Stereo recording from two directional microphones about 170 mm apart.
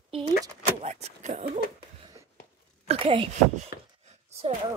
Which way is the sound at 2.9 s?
30° right (ahead or behind).